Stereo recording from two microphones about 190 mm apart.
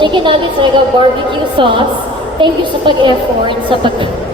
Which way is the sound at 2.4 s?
25° right (ahead or behind).